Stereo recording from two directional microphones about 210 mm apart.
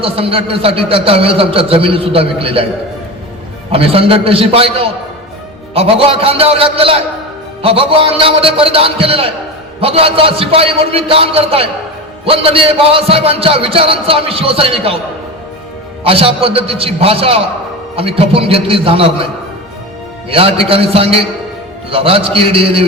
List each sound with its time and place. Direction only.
0.0 s a man's voice: 25° right (ahead or behind)
3.7 s a man's voice: 25° right (ahead or behind)
16.0 s a man's voice: 25° right (ahead or behind)
20.3 s a man's voice: 25° right (ahead or behind)